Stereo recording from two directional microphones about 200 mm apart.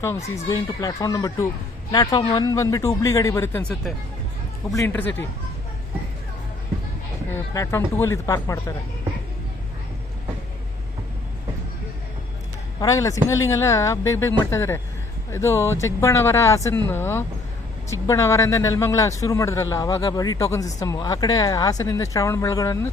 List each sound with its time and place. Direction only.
0.4 s a man's voice: 20° left (ahead or behind)
7.3 s a man's voice: 15° left (ahead or behind)
12.8 s a man's voice: 15° left (ahead or behind)